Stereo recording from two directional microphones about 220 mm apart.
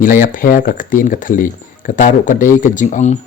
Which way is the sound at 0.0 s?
40° left (ahead or behind).